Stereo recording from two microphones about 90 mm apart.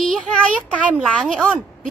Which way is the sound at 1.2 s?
Centre (ahead or behind).